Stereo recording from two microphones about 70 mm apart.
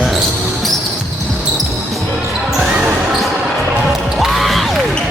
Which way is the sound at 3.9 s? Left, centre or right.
Centre.